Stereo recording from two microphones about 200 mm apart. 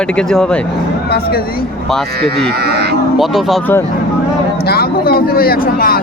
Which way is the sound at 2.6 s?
55° right (ahead or behind).